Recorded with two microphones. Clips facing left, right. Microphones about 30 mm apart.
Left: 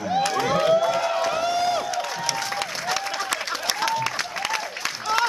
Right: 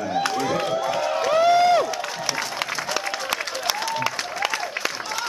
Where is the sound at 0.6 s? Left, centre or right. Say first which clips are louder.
Left 4 dB; centre.